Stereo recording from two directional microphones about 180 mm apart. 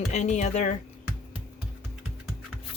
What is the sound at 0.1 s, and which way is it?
Speech, 40° left (ahead or behind).